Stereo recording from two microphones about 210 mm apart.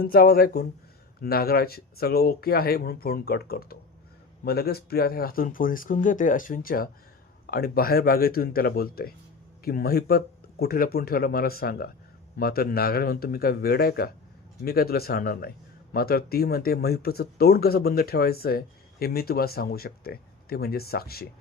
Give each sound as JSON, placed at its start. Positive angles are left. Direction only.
{"t": 0.0, "sound": "a man's voice", "side_deg": 45}